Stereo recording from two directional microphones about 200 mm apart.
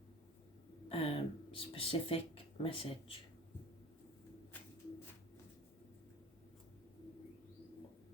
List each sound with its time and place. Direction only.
0.9 s speech: 30° left (ahead or behind)